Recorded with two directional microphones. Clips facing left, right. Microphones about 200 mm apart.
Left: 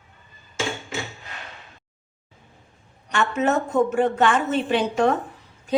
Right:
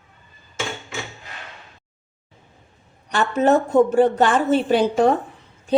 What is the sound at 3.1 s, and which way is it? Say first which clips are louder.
A woman's voice: right 4 dB; 35° right (ahead or behind).